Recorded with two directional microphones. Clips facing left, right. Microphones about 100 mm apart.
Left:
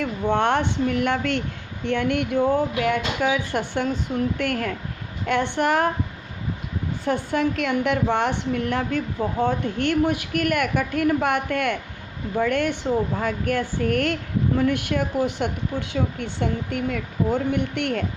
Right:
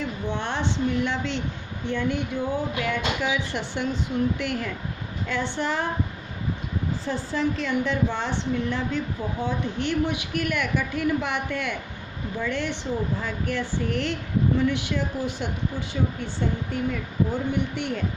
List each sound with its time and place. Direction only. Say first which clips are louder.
0.0 s speech: left 8 dB; 60° left (ahead or behind)
7.0 s speech: left 5 dB; 60° left (ahead or behind)